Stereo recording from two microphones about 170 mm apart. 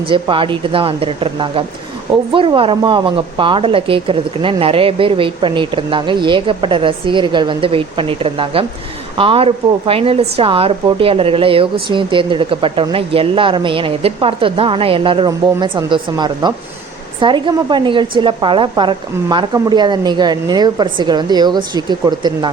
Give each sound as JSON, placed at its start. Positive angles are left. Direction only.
{"t": 0.1, "sound": "a woman's voice", "side_deg": -30}